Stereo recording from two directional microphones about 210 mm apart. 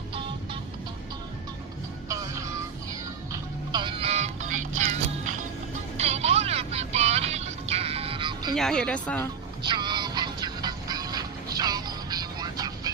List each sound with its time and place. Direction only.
2.0 s music: 15° right (ahead or behind)
8.5 s speech: 5° left (ahead or behind)
9.6 s music: 20° right (ahead or behind)